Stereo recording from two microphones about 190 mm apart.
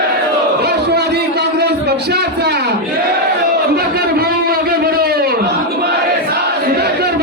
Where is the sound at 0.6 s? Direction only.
60° right (ahead or behind).